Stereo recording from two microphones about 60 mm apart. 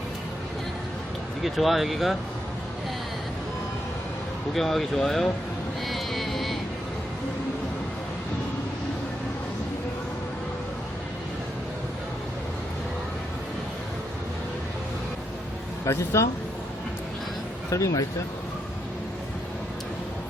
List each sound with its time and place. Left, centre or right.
1.4 s speech: centre
4.5 s speech: centre
5.9 s vehicle: centre
15.9 s speech: left
17.7 s speech: left